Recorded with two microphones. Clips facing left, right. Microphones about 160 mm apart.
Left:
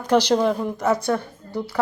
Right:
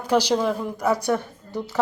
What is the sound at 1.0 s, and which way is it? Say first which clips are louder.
Speech: even; 20° right (ahead or behind).